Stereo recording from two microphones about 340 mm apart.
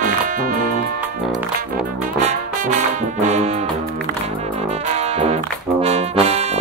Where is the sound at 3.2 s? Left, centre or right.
Centre.